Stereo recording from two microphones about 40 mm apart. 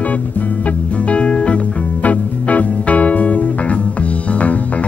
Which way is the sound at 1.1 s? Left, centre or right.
Left.